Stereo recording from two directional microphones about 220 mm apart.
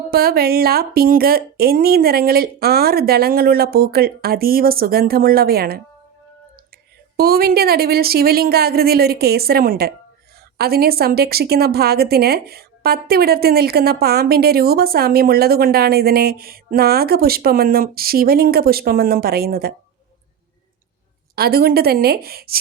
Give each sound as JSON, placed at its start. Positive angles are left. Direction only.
{"t": 0.1, "sound": "a woman's voice", "side_deg": -45}
{"t": 7.2, "sound": "a woman's voice", "side_deg": -45}
{"t": 21.3, "sound": "a woman's voice", "side_deg": -45}